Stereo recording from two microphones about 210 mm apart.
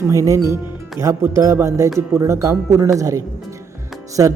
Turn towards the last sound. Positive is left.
turn(degrees=-15)  # may be behind; listen again after turning